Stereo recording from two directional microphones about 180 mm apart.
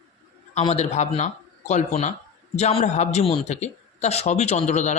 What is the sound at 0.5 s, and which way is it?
Speech, 35° left (ahead or behind).